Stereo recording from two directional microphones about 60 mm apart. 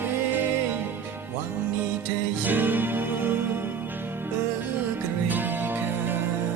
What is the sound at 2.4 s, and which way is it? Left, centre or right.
Music, right.